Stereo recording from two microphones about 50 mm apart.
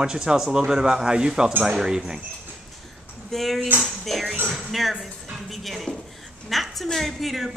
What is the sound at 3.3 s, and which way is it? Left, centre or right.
Speech, centre.